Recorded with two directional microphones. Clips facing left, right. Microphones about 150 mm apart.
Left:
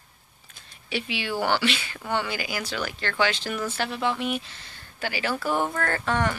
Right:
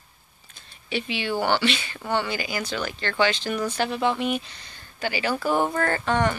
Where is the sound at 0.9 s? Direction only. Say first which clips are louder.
Right 2 dB; 5° left (ahead or behind).